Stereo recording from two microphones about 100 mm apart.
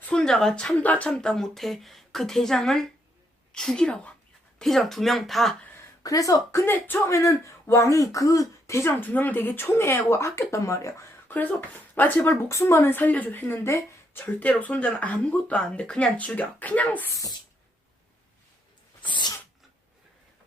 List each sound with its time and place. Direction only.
0.1 s speech: 5° left (ahead or behind)
6.0 s speech: 35° left (ahead or behind)
11.3 s speech: 20° left (ahead or behind)
12.5 s speech: 30° left (ahead or behind)
17.1 s speech: 35° left (ahead or behind)
19.0 s sneeze: 50° left (ahead or behind)